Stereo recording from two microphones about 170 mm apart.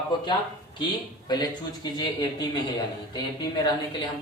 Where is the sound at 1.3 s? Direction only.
25° left (ahead or behind).